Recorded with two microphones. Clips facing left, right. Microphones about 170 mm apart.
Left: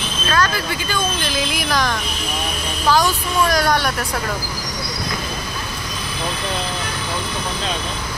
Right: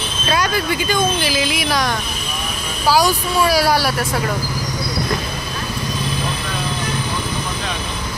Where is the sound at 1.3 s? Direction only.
Centre (ahead or behind).